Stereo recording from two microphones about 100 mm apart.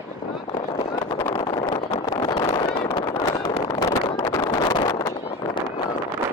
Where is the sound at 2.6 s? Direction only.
50° left (ahead or behind).